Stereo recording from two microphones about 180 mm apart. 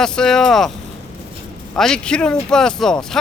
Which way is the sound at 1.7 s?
5° left (ahead or behind).